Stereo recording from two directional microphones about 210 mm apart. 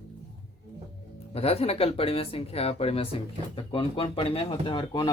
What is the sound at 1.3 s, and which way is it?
Speech, 30° left (ahead or behind).